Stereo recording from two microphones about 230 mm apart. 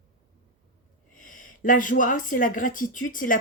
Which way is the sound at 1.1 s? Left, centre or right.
Left.